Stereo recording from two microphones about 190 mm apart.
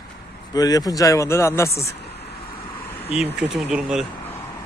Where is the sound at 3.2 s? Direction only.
5° right (ahead or behind).